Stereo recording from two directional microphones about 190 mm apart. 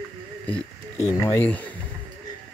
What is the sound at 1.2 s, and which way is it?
Speech, 10° left (ahead or behind).